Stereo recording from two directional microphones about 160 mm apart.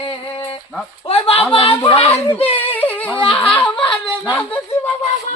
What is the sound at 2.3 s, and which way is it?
Yodeling, 35° left (ahead or behind).